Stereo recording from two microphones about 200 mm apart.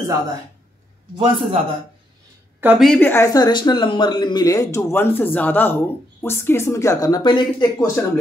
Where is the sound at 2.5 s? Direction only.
5° right (ahead or behind).